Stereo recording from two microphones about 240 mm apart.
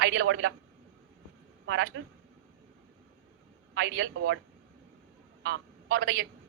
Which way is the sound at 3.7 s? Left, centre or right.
Right.